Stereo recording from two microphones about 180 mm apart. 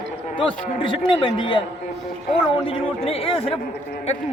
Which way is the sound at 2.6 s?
30° left (ahead or behind).